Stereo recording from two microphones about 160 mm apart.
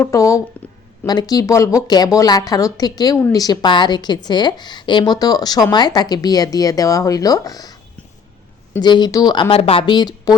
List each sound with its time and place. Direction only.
0.0 s a woman's voice: 20° left (ahead or behind)
8.8 s a woman's voice: 25° left (ahead or behind)